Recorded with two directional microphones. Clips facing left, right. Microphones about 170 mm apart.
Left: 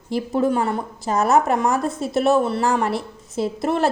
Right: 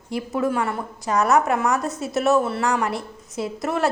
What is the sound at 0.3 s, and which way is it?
A woman's voice, 30° left (ahead or behind).